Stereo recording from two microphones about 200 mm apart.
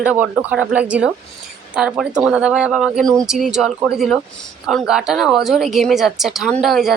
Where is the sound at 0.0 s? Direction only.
5° right (ahead or behind).